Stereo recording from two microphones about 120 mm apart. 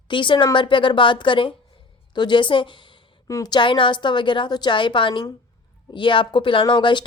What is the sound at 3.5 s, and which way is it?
A woman's voice, 40° left (ahead or behind).